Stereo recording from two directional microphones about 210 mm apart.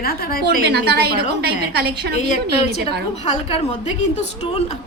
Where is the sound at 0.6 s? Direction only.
50° right (ahead or behind).